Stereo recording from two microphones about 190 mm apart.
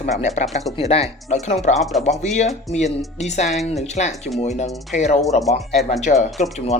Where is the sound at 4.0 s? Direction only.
35° left (ahead or behind).